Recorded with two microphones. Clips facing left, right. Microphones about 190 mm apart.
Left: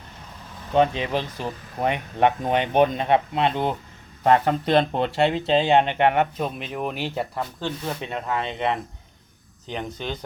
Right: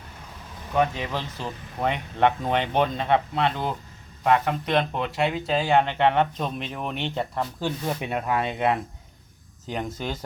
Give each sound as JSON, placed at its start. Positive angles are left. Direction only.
{"t": 0.7, "sound": "speech", "side_deg": 20}
{"t": 4.2, "sound": "speech", "side_deg": 35}
{"t": 7.6, "sound": "speech", "side_deg": -10}